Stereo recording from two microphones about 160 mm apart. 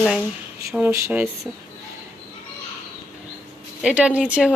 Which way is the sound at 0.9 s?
15° right (ahead or behind).